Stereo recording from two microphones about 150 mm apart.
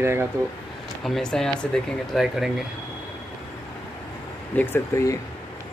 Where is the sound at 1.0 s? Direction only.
5° left (ahead or behind).